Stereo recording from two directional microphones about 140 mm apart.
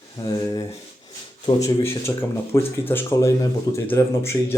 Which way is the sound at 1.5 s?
25° left (ahead or behind).